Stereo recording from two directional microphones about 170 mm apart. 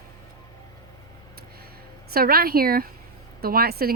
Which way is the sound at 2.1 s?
60° right (ahead or behind).